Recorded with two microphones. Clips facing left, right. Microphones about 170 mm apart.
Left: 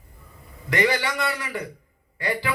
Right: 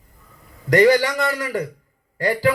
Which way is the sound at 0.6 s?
40° right (ahead or behind).